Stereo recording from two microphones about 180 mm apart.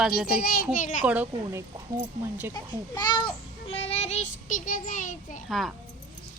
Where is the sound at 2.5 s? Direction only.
25° left (ahead or behind).